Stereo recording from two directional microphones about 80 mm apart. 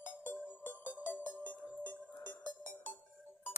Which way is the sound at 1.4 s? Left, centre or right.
Centre.